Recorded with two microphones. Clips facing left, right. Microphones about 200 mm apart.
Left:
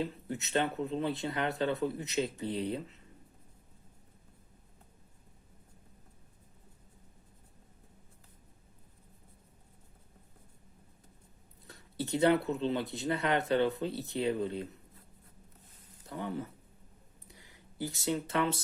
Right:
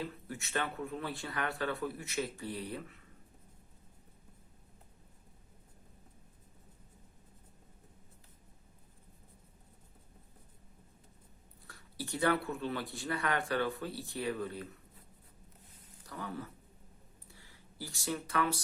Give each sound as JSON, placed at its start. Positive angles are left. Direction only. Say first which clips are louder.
{"t": 0.0, "sound": "speech", "louder": "left 5 dB", "side_deg": 20}
{"t": 11.7, "sound": "speech", "louder": "left 7 dB", "side_deg": 20}
{"t": 16.0, "sound": "speech", "louder": "left 5 dB", "side_deg": 20}
{"t": 17.2, "sound": "a sound", "louder": "left 3 dB", "side_deg": 15}